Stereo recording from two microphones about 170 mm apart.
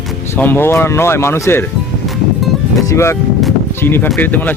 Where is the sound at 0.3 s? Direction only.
10° left (ahead or behind).